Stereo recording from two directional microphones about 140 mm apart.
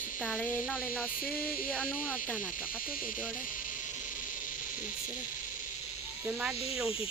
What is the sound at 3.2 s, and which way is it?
Cricket, 10° right (ahead or behind).